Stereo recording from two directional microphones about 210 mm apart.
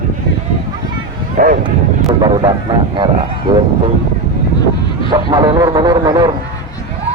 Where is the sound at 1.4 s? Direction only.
40° right (ahead or behind).